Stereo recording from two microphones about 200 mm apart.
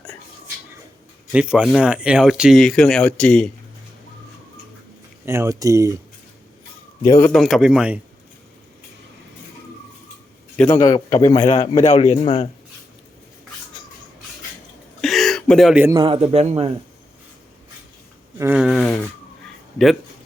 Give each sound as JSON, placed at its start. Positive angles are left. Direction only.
{"t": 1.3, "sound": "speech", "side_deg": -5}
{"t": 5.2, "sound": "speech", "side_deg": -15}
{"t": 7.1, "sound": "speech", "side_deg": 10}
{"t": 10.6, "sound": "a man's voice", "side_deg": 10}
{"t": 11.4, "sound": "a man's voice", "side_deg": 30}
{"t": 15.0, "sound": "a sound", "side_deg": 0}
{"t": 16.0, "sound": "a man's voice", "side_deg": -30}
{"t": 18.3, "sound": "speech", "side_deg": -10}